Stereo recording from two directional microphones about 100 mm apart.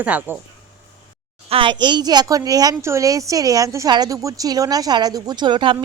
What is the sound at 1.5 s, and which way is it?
Speech, 65° right (ahead or behind).